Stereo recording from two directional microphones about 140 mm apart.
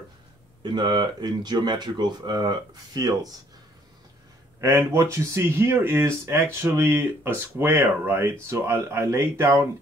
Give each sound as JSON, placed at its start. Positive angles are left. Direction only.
{"t": 0.6, "sound": "speech", "side_deg": -35}
{"t": 4.6, "sound": "speech", "side_deg": -20}